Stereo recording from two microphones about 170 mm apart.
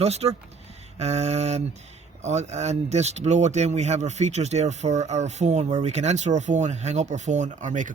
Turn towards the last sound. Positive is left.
turn(degrees=-45)  # may be behind; listen again after turning